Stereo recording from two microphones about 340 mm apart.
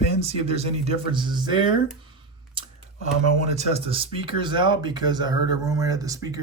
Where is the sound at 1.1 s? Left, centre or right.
Centre.